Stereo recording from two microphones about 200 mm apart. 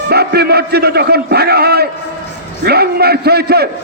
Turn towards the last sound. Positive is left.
turn(degrees=-55)  # may be behind; listen again after turning